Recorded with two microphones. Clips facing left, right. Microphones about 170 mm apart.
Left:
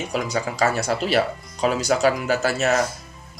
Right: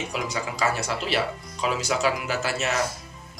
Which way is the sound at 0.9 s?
45° left (ahead or behind).